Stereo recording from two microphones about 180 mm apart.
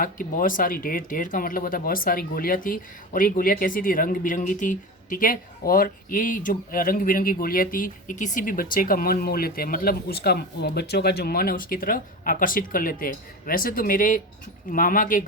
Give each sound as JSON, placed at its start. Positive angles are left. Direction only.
{"t": 0.0, "sound": "speech", "side_deg": 50}